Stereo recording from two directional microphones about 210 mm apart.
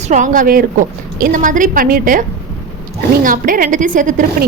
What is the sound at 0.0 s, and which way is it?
A woman's voice, 35° right (ahead or behind).